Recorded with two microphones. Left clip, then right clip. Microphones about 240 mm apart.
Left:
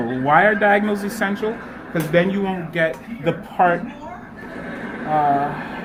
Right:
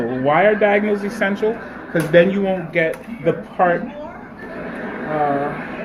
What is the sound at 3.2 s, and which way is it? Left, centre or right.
Speech, left.